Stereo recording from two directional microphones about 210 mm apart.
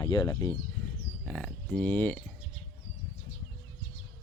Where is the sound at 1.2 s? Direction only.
5° left (ahead or behind).